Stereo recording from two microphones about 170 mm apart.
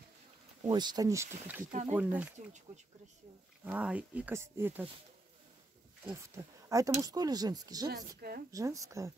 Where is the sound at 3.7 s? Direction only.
5° right (ahead or behind).